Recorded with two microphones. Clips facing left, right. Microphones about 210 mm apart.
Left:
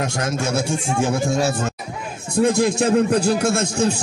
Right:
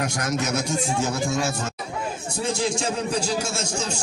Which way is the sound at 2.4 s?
60° left (ahead or behind).